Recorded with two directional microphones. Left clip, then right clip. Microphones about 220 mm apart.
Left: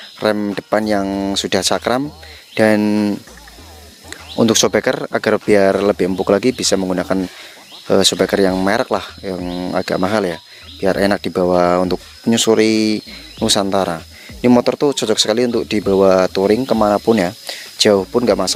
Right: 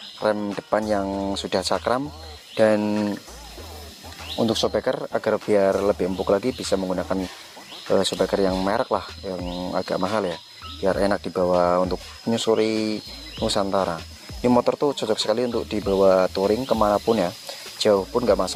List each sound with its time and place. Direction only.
0.2 s speech: 45° left (ahead or behind)
4.4 s speech: 50° left (ahead or behind)